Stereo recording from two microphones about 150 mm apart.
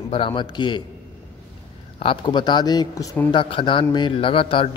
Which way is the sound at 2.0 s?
30° left (ahead or behind).